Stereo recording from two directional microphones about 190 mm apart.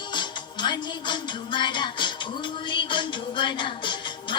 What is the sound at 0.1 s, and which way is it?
Music, 25° left (ahead or behind).